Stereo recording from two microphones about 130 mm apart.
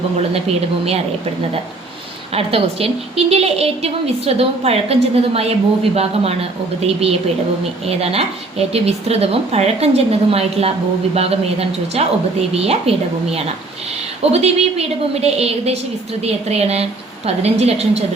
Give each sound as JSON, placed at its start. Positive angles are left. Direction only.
{"t": 0.4, "sound": "speech", "side_deg": -55}
{"t": 2.3, "sound": "speech", "side_deg": -45}
{"t": 7.9, "sound": "speech", "side_deg": -50}
{"t": 14.3, "sound": "speech", "side_deg": -55}